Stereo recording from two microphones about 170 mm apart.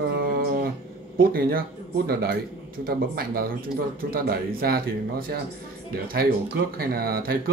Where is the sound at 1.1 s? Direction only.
60° right (ahead or behind).